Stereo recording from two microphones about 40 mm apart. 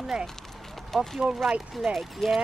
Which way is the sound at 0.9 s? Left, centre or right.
Centre.